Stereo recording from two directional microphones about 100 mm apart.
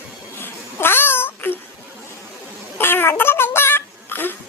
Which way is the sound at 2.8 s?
20° left (ahead or behind).